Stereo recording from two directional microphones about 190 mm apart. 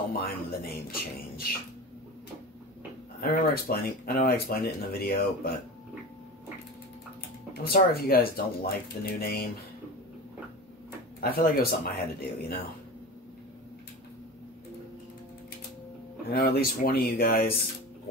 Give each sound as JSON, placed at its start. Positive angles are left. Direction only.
{"t": 0.2, "sound": "speech", "side_deg": 55}
{"t": 3.2, "sound": "speech", "side_deg": 50}
{"t": 7.6, "sound": "speech", "side_deg": 55}
{"t": 11.1, "sound": "speech", "side_deg": 55}
{"t": 16.3, "sound": "speech", "side_deg": 50}